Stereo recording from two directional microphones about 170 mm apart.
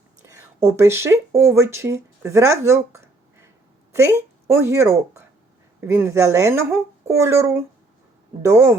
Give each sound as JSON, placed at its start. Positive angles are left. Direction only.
{"t": 0.2, "sound": "a woman's voice", "side_deg": -15}